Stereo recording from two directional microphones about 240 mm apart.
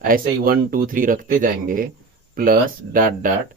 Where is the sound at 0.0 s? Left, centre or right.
Right.